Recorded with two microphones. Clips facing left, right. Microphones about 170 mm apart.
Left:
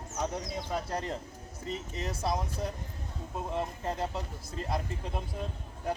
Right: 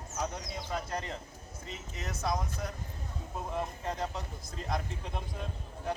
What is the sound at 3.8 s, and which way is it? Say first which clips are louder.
Speech: left 2 dB; 5° left (ahead or behind).